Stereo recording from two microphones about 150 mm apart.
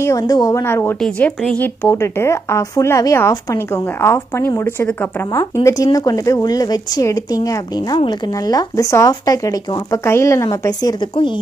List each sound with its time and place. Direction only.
0.0 s speech: 25° left (ahead or behind)
1.0 s a woman's voice: 5° left (ahead or behind); by 11.2 s 25° left (ahead or behind)